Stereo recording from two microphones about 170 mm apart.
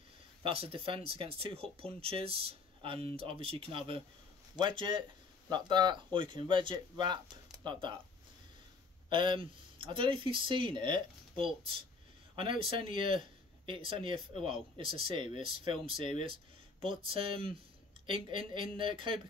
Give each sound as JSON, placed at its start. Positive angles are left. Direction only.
{"t": 0.4, "sound": "speech", "side_deg": -35}
{"t": 9.1, "sound": "speech", "side_deg": -30}